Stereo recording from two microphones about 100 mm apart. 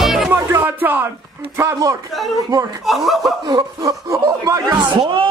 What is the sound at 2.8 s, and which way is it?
Speech, centre (ahead or behind).